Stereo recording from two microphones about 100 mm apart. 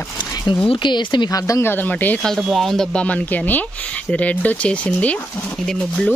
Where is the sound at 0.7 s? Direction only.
50° left (ahead or behind).